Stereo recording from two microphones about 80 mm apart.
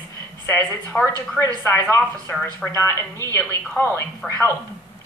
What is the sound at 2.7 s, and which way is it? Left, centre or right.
A man's voice, left.